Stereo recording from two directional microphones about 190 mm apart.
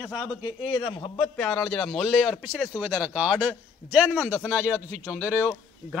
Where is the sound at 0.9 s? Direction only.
25° left (ahead or behind).